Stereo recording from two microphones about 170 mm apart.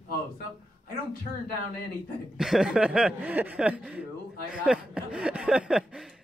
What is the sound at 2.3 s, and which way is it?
Speech, 5° right (ahead or behind).